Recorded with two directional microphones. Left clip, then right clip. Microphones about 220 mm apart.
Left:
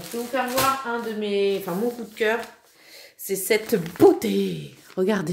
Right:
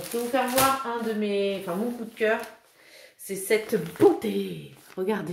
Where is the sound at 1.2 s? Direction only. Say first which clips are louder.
Left 4 dB; 45° left (ahead or behind).